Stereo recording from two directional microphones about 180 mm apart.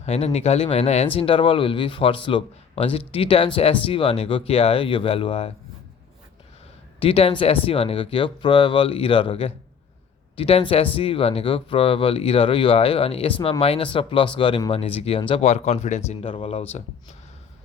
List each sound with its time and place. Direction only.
0.0 s speech: 35° left (ahead or behind)
7.0 s speech: 35° left (ahead or behind)